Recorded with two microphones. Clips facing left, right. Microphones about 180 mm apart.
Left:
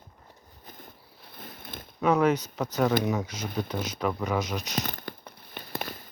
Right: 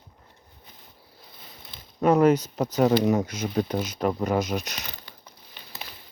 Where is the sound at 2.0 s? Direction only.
45° right (ahead or behind).